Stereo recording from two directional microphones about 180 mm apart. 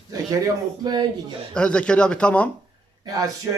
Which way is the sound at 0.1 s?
20° right (ahead or behind).